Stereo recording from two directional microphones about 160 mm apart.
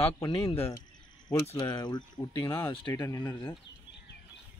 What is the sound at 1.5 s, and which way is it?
Speech, 25° left (ahead or behind).